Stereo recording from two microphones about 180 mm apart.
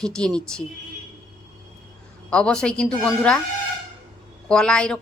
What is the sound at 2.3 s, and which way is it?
Speech, 5° left (ahead or behind).